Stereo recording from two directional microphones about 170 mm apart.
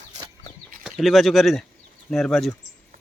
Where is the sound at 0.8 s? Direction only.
Centre (ahead or behind).